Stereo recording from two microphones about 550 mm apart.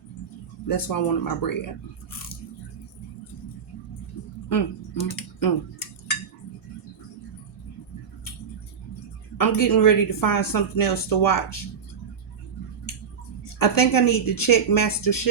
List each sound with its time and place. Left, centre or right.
0.7 s speech: left
4.4 s typing: left
9.4 s speech: left
13.6 s speech: left